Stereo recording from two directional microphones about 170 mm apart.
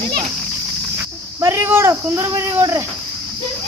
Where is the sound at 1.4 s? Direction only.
15° right (ahead or behind).